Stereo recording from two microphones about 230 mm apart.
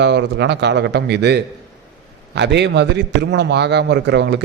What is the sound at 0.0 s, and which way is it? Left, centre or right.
A man's voice, right.